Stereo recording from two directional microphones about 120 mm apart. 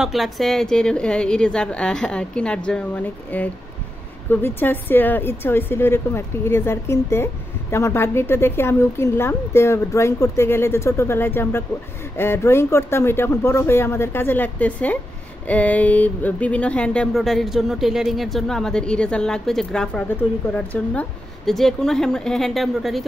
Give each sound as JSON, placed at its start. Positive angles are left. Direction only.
{"t": 0.0, "sound": "a woman's voice", "side_deg": 0}